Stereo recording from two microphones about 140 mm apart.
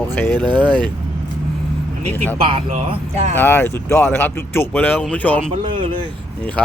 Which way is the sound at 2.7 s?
55° right (ahead or behind).